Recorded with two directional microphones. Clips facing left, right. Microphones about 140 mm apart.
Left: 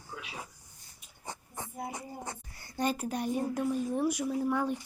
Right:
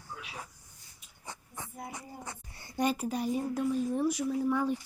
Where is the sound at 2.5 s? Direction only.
20° right (ahead or behind).